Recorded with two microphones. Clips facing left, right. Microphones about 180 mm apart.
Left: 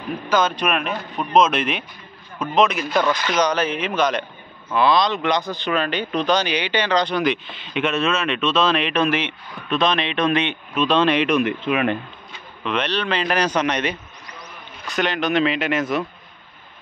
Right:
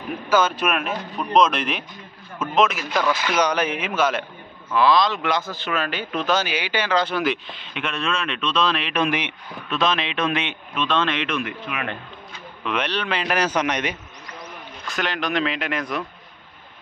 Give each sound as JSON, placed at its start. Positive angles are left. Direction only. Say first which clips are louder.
{"t": 0.3, "sound": "speech", "louder": "even", "side_deg": -5}
{"t": 9.0, "sound": "speech", "louder": "right 1 dB", "side_deg": -15}
{"t": 9.7, "sound": "speech", "louder": "left 3 dB", "side_deg": -5}
{"t": 10.8, "sound": "speech", "louder": "left 5 dB", "side_deg": 15}
{"t": 12.6, "sound": "speech", "louder": "left 2 dB", "side_deg": -10}
{"t": 14.9, "sound": "speech", "louder": "left 4 dB", "side_deg": 0}